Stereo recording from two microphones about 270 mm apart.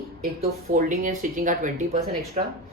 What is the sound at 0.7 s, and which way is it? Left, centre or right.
Speech, right.